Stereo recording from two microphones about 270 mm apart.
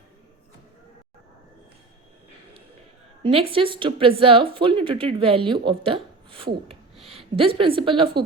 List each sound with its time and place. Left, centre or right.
3.2 s a woman's voice: right